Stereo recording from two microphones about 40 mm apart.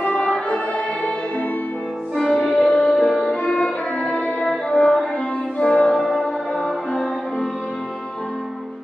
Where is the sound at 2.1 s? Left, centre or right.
Centre.